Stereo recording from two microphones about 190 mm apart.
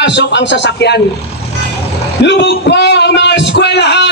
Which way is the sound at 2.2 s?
65° left (ahead or behind).